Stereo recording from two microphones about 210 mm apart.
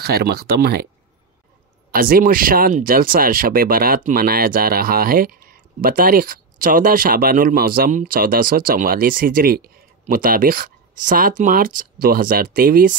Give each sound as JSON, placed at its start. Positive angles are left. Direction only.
{"t": 0.0, "sound": "speech", "side_deg": -50}
{"t": 1.9, "sound": "speech", "side_deg": -45}